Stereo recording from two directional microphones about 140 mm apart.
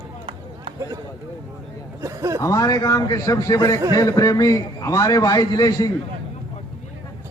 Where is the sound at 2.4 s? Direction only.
25° left (ahead or behind).